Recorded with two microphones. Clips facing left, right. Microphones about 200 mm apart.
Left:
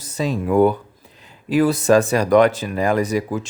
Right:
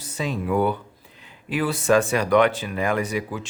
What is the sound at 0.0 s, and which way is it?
Speech, 40° left (ahead or behind).